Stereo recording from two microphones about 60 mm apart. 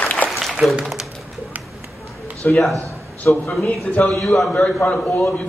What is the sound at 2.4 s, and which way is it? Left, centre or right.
Speech, left.